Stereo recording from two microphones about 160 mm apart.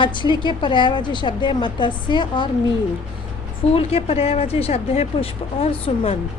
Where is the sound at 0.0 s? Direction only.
30° left (ahead or behind).